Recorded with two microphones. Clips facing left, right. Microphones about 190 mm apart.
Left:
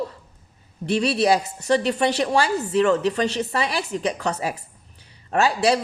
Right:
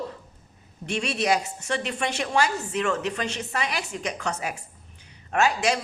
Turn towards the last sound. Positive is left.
turn(degrees=35)  # may be behind; listen again after turning